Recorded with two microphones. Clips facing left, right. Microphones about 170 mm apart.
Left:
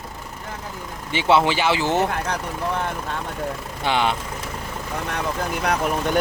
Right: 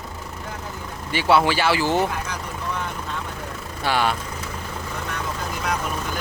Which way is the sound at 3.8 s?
20° left (ahead or behind).